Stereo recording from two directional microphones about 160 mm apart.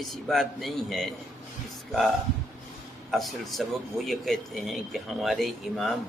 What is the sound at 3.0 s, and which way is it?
Speech, centre (ahead or behind).